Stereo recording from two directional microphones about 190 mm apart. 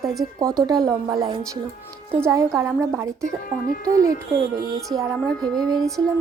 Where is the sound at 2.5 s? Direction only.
Centre (ahead or behind).